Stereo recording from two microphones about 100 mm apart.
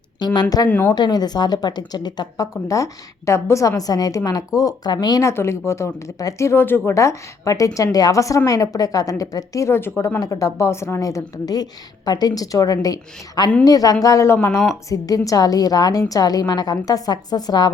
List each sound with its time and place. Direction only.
0.2 s speech: 45° left (ahead or behind)
0.7 s speech: 20° left (ahead or behind)
0.9 s speech: 45° left (ahead or behind)
5.2 s speech: 25° left (ahead or behind); by 17.7 s 45° left (ahead or behind)